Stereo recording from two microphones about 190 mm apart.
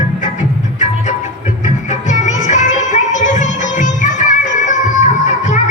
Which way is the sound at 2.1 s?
40° left (ahead or behind).